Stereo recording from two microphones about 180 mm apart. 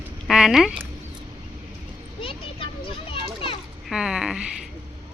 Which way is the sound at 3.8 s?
5° right (ahead or behind).